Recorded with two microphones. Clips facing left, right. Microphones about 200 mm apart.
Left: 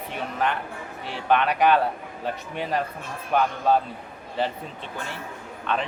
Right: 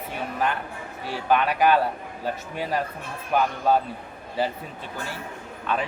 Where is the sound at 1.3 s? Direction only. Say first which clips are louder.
Even; 5° right (ahead or behind).